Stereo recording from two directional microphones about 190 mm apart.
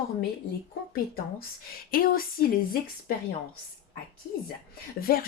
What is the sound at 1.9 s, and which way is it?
Speech, 50° left (ahead or behind).